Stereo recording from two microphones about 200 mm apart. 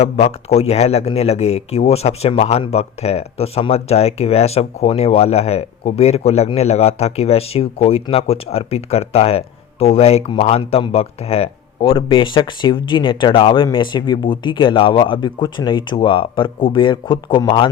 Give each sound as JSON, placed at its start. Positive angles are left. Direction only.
{"t": 0.0, "sound": "speech", "side_deg": 30}